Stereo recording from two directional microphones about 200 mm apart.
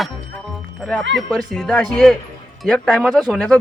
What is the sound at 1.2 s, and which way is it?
Speech, centre (ahead or behind).